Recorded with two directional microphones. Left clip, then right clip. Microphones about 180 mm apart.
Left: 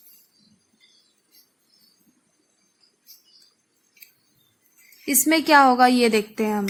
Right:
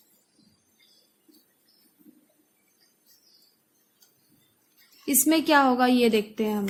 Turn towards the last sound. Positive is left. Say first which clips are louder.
# left 4 dB
turn(degrees=20)  # may be behind; listen again after turning